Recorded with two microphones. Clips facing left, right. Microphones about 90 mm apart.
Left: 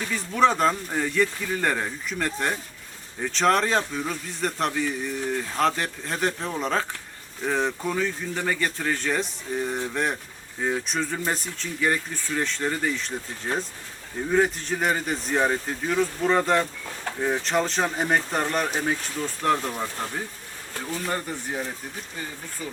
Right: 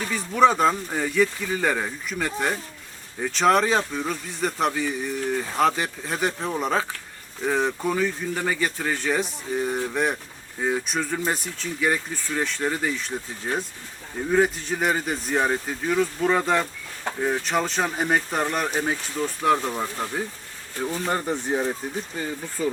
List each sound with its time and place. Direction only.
0.1 s speech: 5° right (ahead or behind)
20.8 s speech: 25° right (ahead or behind)